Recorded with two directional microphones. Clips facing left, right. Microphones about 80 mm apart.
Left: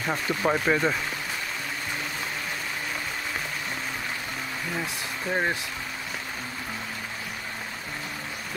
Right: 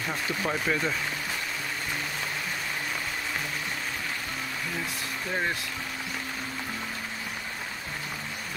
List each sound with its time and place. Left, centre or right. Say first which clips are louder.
0.1 s speech: left 6 dB; left
5.3 s speech: left 3 dB; left